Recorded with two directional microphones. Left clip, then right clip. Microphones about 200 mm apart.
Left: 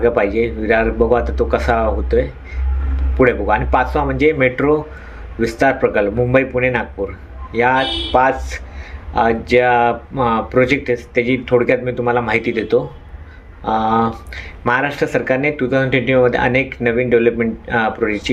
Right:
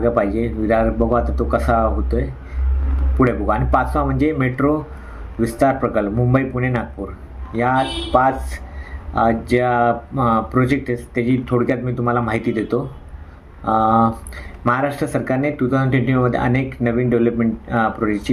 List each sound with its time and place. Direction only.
0.0 s speech: 20° right (ahead or behind)
8.2 s speech: 20° right (ahead or behind)